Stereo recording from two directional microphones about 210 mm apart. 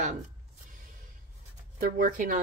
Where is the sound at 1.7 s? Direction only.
40° right (ahead or behind).